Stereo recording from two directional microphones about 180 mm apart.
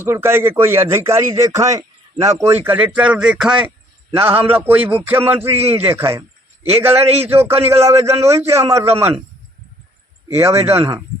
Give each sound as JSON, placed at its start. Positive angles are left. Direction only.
{"t": 0.0, "sound": "speech", "side_deg": -15}
{"t": 5.5, "sound": "a man's voice", "side_deg": -35}
{"t": 5.9, "sound": "speech", "side_deg": -15}
{"t": 6.6, "sound": "a man's voice", "side_deg": -35}
{"t": 7.3, "sound": "speech", "side_deg": -15}
{"t": 10.3, "sound": "speech", "side_deg": -15}